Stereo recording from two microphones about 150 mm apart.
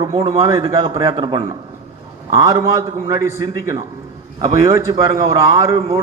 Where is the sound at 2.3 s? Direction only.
25° right (ahead or behind).